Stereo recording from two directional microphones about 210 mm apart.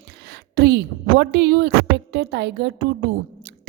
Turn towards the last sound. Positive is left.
turn(degrees=-55)  # may be behind; listen again after turning